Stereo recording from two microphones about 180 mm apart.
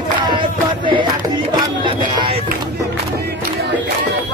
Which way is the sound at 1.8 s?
30° right (ahead or behind).